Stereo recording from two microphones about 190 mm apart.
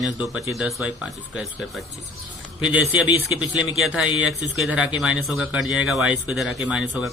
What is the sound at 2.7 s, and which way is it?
Speech, 10° right (ahead or behind).